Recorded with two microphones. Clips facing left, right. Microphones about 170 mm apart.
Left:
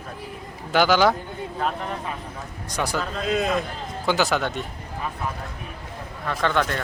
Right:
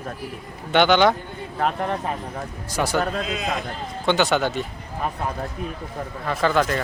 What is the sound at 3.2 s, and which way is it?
Speech, 50° left (ahead or behind).